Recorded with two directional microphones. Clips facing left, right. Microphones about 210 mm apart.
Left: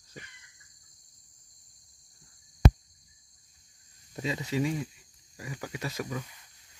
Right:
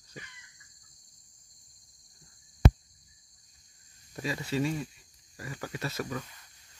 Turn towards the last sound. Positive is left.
turn(degrees=10)  # may be behind; listen again after turning